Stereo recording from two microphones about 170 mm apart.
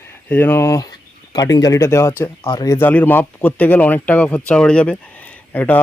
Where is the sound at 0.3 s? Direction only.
10° left (ahead or behind).